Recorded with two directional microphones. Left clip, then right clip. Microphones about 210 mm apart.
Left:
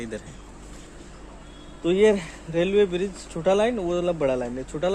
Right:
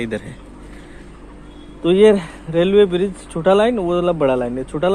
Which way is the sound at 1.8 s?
35° right (ahead or behind).